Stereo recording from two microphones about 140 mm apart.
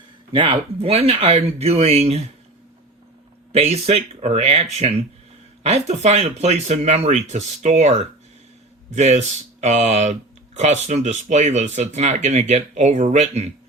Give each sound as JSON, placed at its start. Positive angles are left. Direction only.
{"t": 0.3, "sound": "speech", "side_deg": -45}
{"t": 3.5, "sound": "speech", "side_deg": -50}